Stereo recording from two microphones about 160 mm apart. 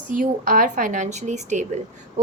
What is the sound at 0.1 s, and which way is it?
A woman's voice, 60° right (ahead or behind).